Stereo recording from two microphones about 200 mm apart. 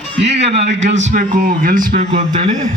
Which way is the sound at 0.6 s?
65° right (ahead or behind).